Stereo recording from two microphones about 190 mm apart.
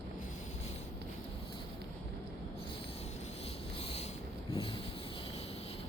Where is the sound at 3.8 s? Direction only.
30° left (ahead or behind).